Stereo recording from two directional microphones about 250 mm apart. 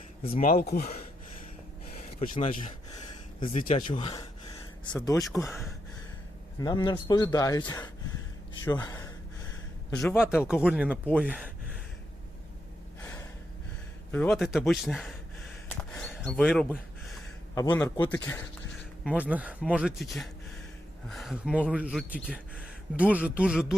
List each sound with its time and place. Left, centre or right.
0.2 s speech: left
0.4 s speech: left
1.9 s a sound: left
3.7 s speech: centre
10.0 s speech: centre
14.1 s speech: centre
15.7 s a sound: centre
17.5 s speech: centre
19.0 s speech: centre